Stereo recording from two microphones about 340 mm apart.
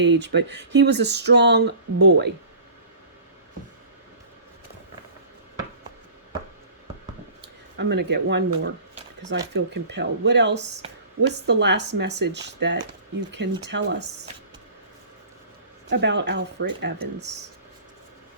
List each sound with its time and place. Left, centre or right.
0.0 s speech: right
7.8 s speech: right
15.9 s speech: right